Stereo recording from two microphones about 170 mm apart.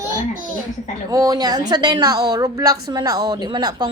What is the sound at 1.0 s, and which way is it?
A woman's voice, 20° right (ahead or behind).